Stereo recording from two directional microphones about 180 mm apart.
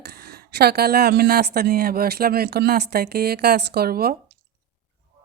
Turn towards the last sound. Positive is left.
turn(degrees=-60)  # may be behind; listen again after turning